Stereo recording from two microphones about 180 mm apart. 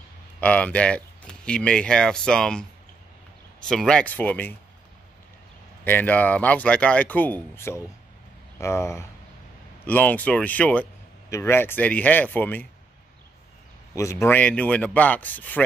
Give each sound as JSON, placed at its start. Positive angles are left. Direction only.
{"t": 0.4, "sound": "speech", "side_deg": 5}
{"t": 3.6, "sound": "a man's voice", "side_deg": 5}
{"t": 5.9, "sound": "a man's voice", "side_deg": 10}
{"t": 13.9, "sound": "a man's voice", "side_deg": 15}